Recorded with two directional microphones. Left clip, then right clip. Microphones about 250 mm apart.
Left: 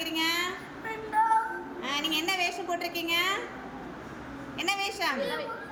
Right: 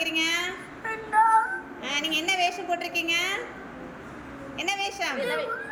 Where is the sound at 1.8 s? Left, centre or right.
Centre.